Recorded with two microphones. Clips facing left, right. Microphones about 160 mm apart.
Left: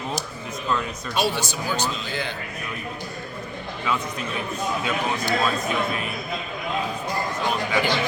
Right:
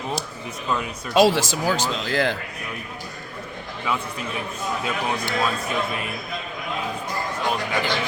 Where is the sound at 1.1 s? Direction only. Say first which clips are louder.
Right 8 dB; 90° right.